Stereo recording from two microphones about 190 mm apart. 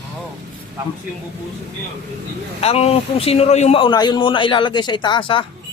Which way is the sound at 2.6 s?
35° left (ahead or behind).